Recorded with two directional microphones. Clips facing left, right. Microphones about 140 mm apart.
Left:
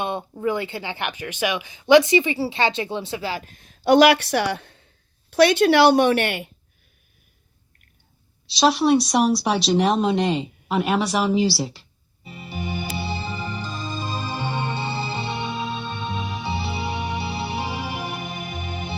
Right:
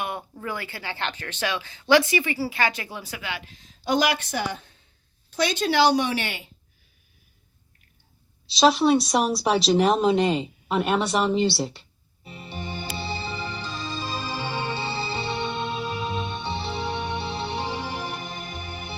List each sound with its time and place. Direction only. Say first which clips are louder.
0.0 s a woman's voice: left 7 dB; 25° left (ahead or behind); by 6.5 s 60° left (ahead or behind)
8.4 s speech: left 1 dB; centre (ahead or behind)
14.8 s music: left 2 dB; 15° left (ahead or behind)